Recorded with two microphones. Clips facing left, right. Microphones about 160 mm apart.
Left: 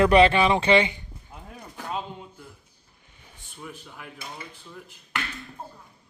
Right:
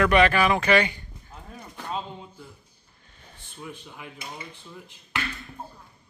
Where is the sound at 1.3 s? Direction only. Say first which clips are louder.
Even; 5° left (ahead or behind).